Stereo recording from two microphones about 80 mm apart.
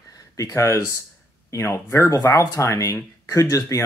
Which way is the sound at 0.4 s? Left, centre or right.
Left.